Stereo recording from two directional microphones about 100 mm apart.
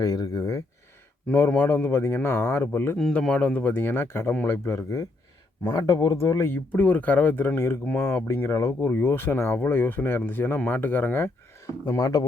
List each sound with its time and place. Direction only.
0.0 s speech: 40° left (ahead or behind)
1.3 s speech: 20° left (ahead or behind)
3.0 s a man's voice: 10° left (ahead or behind)
11.9 s speech: 35° left (ahead or behind)